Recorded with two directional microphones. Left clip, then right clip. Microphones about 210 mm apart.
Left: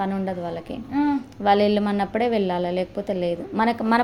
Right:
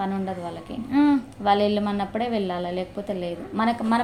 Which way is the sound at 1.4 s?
35° left (ahead or behind).